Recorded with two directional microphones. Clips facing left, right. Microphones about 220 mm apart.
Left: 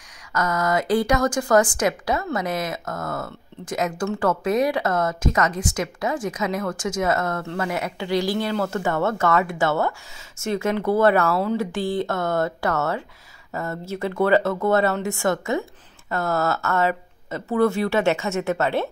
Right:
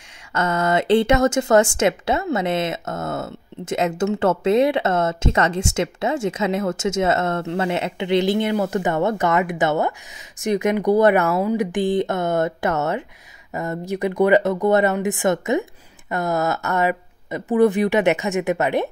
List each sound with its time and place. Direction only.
0.3 s speech: 25° right (ahead or behind)